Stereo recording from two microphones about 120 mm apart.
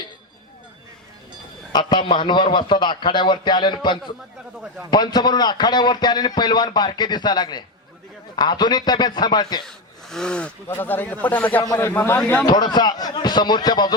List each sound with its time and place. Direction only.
1.7 s a man's voice: 40° left (ahead or behind)
9.6 s speech: 5° left (ahead or behind)
11.6 s a man's voice: 25° left (ahead or behind)
12.5 s a man's voice: 35° left (ahead or behind)